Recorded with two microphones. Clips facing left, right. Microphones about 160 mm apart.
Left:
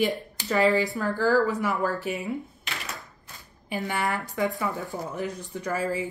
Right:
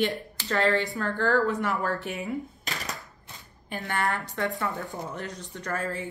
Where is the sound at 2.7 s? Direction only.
40° right (ahead or behind).